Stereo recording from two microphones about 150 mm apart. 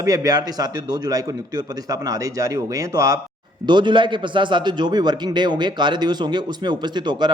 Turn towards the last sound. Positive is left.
turn(degrees=-30)  # may be behind; listen again after turning